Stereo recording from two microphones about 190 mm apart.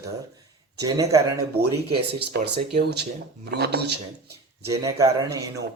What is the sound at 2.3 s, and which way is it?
Speech, 60° right (ahead or behind).